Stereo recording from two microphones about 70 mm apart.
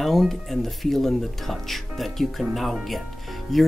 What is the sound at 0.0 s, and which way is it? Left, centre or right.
Speech, centre.